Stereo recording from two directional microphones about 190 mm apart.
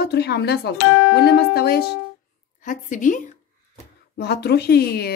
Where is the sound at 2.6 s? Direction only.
45° left (ahead or behind).